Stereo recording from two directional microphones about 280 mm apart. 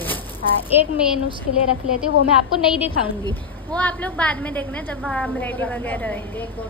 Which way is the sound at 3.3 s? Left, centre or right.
Centre.